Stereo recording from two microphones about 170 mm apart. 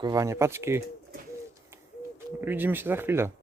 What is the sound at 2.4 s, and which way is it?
Speech, 10° right (ahead or behind).